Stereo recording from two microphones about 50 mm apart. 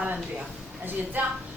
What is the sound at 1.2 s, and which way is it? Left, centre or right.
Speech, right.